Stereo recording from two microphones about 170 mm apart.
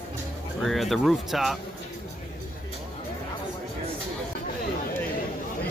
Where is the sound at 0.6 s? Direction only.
Centre (ahead or behind).